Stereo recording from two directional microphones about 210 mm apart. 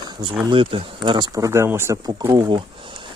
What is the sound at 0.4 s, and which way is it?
Speech, 25° right (ahead or behind).